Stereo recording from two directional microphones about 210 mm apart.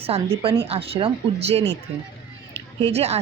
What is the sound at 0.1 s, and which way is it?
A woman's voice, 30° right (ahead or behind).